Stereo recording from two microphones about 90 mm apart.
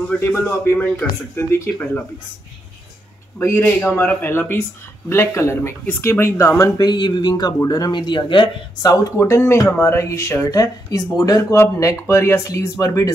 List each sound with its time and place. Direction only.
0.2 s speech: 30° left (ahead or behind)
3.3 s speech: 30° left (ahead or behind)
6.8 s speech: 50° left (ahead or behind)
8.0 s speech: 60° left (ahead or behind)
8.8 s speech: 30° left (ahead or behind)
11.5 s speech: 30° left (ahead or behind)